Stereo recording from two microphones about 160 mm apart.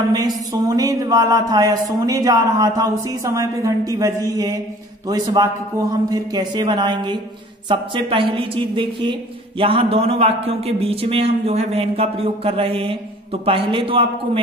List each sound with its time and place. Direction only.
0.5 s a woman's voice: 20° right (ahead or behind)